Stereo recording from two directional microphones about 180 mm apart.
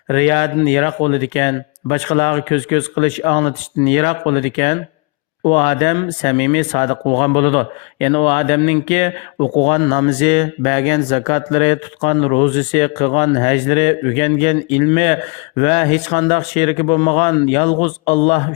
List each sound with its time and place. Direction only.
0.1 s speech: 35° left (ahead or behind)